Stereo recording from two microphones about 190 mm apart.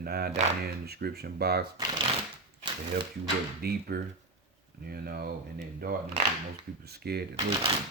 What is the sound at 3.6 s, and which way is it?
Speech, 55° right (ahead or behind).